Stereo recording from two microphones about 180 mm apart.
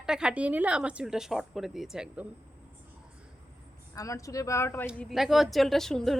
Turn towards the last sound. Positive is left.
turn(degrees=0)  # may be behind; listen again after turning